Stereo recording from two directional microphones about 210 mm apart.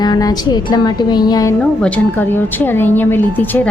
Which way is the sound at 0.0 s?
20° left (ahead or behind).